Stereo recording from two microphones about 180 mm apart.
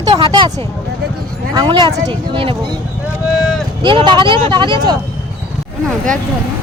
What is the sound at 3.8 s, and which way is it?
Speech, 25° right (ahead or behind).